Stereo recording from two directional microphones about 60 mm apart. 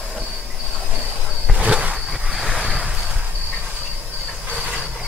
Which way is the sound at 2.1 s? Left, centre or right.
Centre.